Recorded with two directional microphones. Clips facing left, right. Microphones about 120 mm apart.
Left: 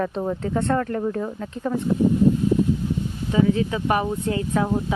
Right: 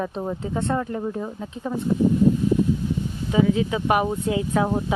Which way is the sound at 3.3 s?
10° right (ahead or behind).